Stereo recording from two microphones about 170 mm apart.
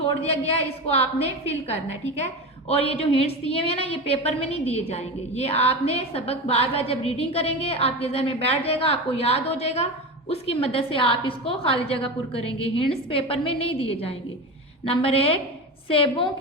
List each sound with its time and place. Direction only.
0.2 s a woman's voice: 35° left (ahead or behind)